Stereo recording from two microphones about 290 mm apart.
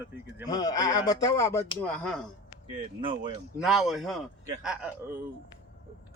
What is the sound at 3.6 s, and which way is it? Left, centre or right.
Speech, centre.